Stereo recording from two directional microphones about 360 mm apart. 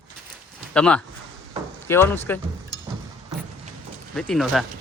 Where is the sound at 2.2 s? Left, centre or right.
Centre.